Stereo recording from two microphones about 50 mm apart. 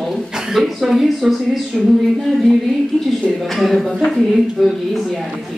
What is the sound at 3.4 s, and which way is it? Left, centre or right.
Speech, centre.